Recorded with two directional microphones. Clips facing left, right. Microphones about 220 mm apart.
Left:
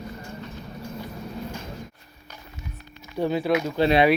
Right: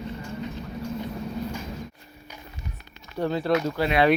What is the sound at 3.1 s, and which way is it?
Speech, 10° left (ahead or behind).